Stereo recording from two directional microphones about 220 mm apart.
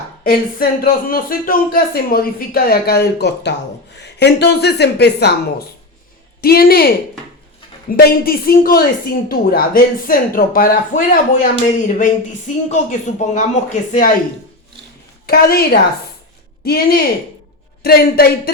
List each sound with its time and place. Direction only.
0.3 s speech: 40° left (ahead or behind)
15.3 s speech: 45° left (ahead or behind)